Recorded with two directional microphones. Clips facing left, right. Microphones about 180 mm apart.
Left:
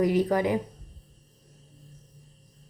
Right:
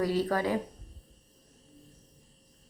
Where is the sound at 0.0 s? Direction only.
20° left (ahead or behind).